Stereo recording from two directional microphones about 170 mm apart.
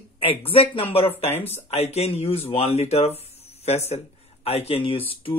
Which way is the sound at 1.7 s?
40° left (ahead or behind).